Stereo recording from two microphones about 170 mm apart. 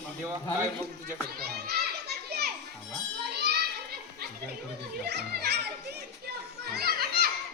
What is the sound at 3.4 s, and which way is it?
Children playing, 70° right (ahead or behind).